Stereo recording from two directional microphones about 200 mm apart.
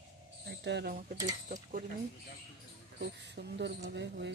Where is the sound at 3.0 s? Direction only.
60° right (ahead or behind).